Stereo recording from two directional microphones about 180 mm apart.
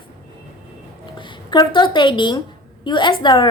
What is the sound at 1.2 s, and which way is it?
A woman's voice, 25° left (ahead or behind).